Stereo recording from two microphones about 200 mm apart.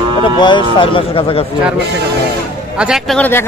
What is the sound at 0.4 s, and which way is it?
A man's voice, 25° left (ahead or behind).